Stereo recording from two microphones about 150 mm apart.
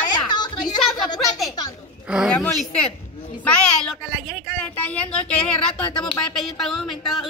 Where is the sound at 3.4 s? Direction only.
10° left (ahead or behind).